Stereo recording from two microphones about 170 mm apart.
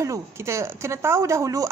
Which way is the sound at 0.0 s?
15° right (ahead or behind).